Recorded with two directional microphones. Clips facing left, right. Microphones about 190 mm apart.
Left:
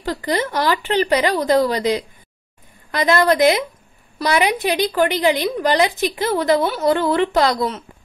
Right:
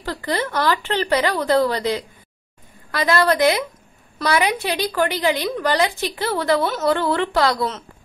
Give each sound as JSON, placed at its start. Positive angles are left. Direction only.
{"t": 0.0, "sound": "a woman's voice", "side_deg": 15}